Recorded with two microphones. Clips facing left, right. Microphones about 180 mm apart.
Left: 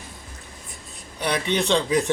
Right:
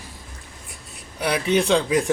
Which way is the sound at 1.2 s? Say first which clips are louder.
Right 3 dB; 5° right (ahead or behind).